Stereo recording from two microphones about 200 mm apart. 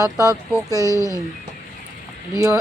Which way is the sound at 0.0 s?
15° right (ahead or behind).